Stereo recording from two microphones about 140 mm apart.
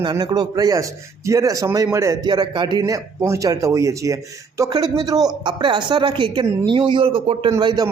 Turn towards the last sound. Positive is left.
turn(degrees=-35)  # may be behind; listen again after turning